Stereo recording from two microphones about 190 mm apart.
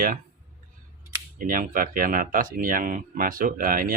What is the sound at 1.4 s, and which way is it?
Speech, 45° right (ahead or behind).